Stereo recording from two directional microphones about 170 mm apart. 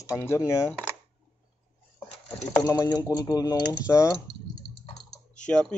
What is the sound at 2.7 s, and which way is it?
Speech, 20° left (ahead or behind).